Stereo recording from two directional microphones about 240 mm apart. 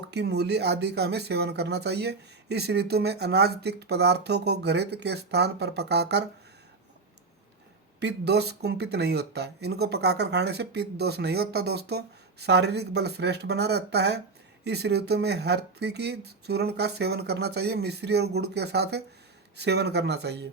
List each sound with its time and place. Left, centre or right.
0.1 s speech: right
7.9 s speech: right